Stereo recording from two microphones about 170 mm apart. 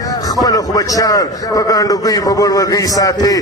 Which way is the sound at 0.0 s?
20° left (ahead or behind).